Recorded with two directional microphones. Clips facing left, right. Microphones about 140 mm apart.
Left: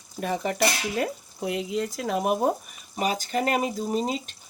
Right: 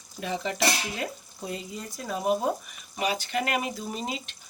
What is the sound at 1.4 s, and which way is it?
Speech, 75° left (ahead or behind).